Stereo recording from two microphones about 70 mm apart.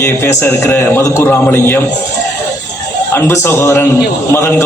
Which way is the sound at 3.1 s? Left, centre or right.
Left.